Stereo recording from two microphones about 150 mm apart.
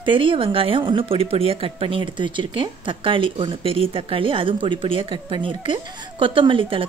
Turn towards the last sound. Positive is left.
turn(degrees=-35)  # may be behind; listen again after turning